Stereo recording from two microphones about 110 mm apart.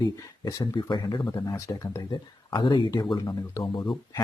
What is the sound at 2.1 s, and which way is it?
Speech, 45° left (ahead or behind).